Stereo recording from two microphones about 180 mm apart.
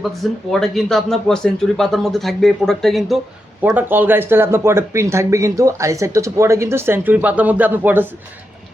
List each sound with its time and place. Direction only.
0.2 s speech: centre (ahead or behind)
3.6 s speech: 10° right (ahead or behind)